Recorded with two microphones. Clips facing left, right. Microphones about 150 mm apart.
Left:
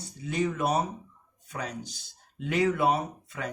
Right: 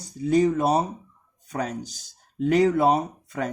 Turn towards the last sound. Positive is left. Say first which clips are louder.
# right 6 dB
turn(degrees=-40)  # may be behind; listen again after turning